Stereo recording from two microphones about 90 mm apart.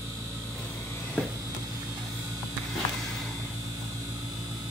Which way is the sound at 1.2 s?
15° left (ahead or behind).